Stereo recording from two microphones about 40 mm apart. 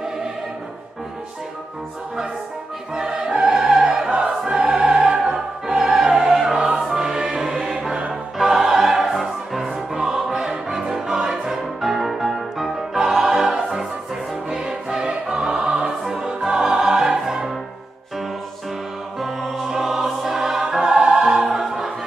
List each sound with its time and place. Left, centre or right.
2.9 s music: centre
4.3 s choir: centre
5.9 s music: centre
16.0 s music: centre
19.1 s music: centre
21.5 s choir: centre